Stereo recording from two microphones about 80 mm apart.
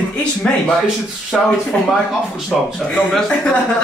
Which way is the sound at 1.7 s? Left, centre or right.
Centre.